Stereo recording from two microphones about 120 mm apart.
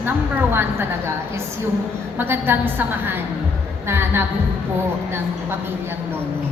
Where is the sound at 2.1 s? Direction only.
20° right (ahead or behind).